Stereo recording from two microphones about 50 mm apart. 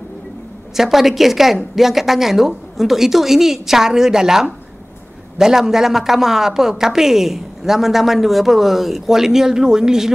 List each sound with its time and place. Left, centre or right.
0.7 s a woman's voice: centre